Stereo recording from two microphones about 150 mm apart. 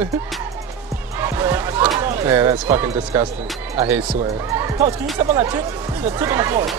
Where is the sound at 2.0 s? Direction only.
15° right (ahead or behind).